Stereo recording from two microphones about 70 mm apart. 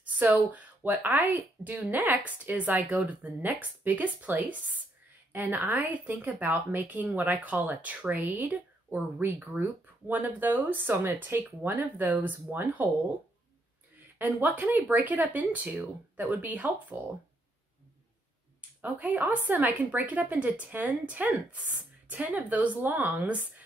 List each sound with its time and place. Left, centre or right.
0.0 s a woman's voice: right
14.1 s a woman's voice: right
18.8 s a woman's voice: right